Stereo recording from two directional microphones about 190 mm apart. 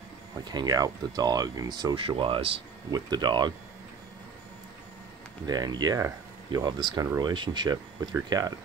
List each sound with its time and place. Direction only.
0.5 s speech: 20° right (ahead or behind)
5.5 s speech: 20° right (ahead or behind)